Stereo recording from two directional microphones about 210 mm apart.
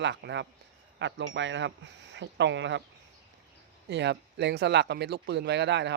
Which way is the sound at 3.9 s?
55° right (ahead or behind).